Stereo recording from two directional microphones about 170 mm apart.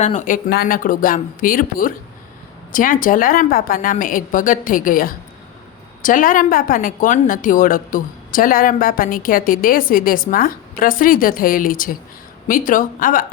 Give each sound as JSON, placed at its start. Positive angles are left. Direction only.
{"t": 0.0, "sound": "a woman's voice", "side_deg": 45}
{"t": 0.5, "sound": "a woman's voice", "side_deg": 55}